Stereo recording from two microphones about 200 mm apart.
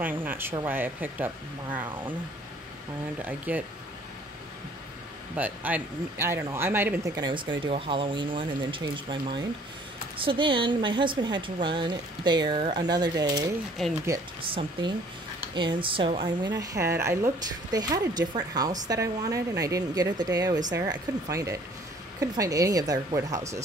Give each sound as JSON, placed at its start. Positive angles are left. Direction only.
{"t": 0.0, "sound": "speech", "side_deg": -10}
{"t": 3.2, "sound": "speech", "side_deg": -10}
{"t": 5.3, "sound": "speech", "side_deg": -10}
{"t": 7.2, "sound": "a woman's voice", "side_deg": -25}
{"t": 16.5, "sound": "a woman's voice", "side_deg": -15}